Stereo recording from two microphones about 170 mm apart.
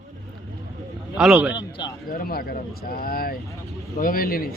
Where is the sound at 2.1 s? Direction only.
60° left (ahead or behind).